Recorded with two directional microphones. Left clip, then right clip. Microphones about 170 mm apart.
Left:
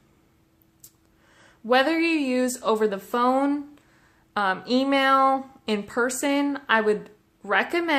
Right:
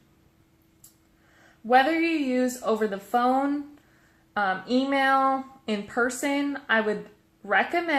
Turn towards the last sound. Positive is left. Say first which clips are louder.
# left 1 dB
turn(degrees=25)  # may be behind; listen again after turning